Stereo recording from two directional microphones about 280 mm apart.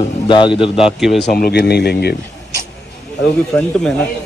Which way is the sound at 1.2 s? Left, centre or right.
Left.